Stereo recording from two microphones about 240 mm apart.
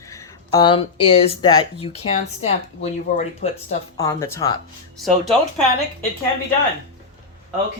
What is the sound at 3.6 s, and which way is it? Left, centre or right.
Speech, centre.